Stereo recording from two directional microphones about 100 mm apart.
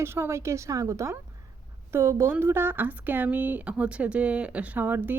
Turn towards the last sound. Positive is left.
turn(degrees=-20)  # may be behind; listen again after turning